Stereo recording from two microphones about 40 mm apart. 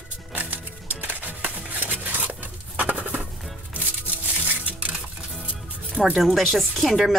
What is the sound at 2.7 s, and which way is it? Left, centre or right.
Bird, right.